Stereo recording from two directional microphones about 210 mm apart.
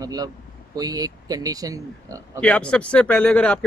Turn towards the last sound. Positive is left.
turn(degrees=5)  # may be behind; listen again after turning